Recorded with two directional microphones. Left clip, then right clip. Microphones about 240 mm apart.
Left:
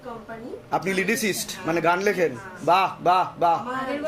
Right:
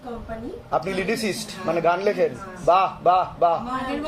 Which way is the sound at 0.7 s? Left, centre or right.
Left.